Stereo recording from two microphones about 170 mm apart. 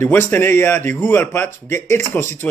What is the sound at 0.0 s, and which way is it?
A man's voice, 15° left (ahead or behind).